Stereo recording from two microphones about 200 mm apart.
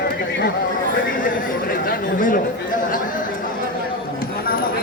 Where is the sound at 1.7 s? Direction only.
45° left (ahead or behind).